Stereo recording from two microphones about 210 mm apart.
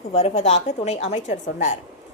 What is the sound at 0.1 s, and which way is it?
A woman's voice, 30° left (ahead or behind).